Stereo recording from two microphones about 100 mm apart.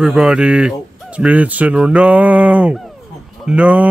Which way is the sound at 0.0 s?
5° right (ahead or behind).